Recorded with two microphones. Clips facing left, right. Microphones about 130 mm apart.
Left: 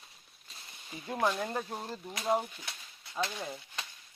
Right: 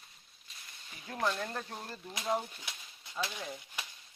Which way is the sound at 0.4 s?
35° left (ahead or behind).